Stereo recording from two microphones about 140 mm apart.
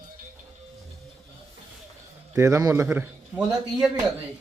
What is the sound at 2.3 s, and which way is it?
A man's voice, 20° right (ahead or behind).